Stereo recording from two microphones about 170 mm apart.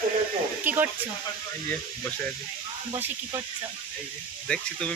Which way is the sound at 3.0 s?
20° right (ahead or behind).